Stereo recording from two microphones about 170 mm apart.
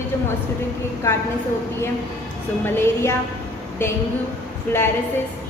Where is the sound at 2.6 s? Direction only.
15° left (ahead or behind).